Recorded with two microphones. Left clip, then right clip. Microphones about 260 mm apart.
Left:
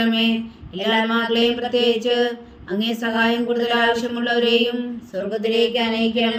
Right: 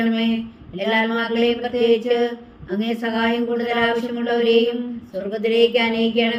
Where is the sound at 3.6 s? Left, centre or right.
Left.